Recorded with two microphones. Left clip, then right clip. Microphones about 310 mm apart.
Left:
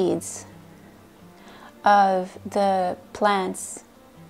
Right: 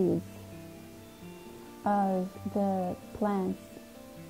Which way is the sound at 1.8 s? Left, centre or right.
Centre.